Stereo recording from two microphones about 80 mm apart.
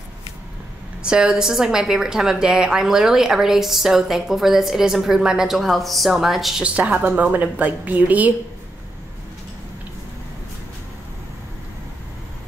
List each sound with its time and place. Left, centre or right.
1.0 s a woman's voice: centre
6.6 s a woman's voice: centre